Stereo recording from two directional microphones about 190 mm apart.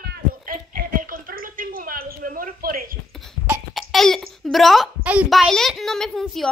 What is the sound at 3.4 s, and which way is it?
Speech, 5° right (ahead or behind).